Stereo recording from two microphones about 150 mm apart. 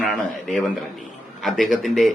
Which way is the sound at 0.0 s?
5° left (ahead or behind).